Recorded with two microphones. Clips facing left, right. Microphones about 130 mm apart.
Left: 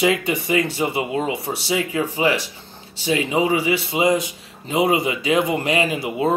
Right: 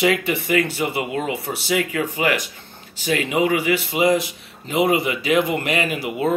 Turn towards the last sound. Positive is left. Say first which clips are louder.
# left 1 dB
turn(degrees=30)  # may be behind; listen again after turning